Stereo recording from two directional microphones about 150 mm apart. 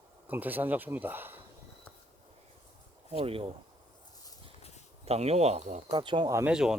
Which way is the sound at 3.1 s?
40° right (ahead or behind).